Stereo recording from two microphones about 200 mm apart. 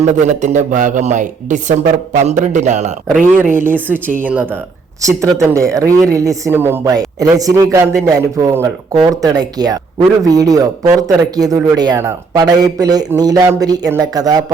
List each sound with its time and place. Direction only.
0.0 s speech: 35° right (ahead or behind)
3.1 s speech: 5° right (ahead or behind)
5.0 s speech: 15° right (ahead or behind)